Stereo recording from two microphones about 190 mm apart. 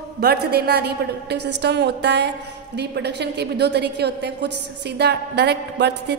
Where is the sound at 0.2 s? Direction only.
55° right (ahead or behind).